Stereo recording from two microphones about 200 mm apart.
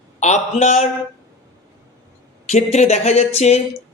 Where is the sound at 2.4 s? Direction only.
35° left (ahead or behind).